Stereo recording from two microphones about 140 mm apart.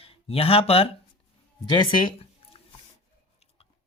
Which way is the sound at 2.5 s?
40° left (ahead or behind).